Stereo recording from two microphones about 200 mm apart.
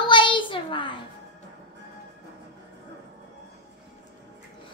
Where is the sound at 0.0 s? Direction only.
25° left (ahead or behind).